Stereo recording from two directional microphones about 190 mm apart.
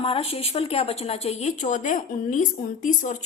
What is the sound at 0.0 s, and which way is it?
A woman's voice, 30° left (ahead or behind).